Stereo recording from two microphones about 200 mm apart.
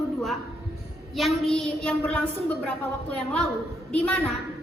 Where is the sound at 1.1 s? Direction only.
Centre (ahead or behind).